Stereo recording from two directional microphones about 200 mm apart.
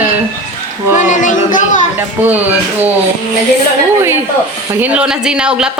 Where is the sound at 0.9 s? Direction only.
35° left (ahead or behind).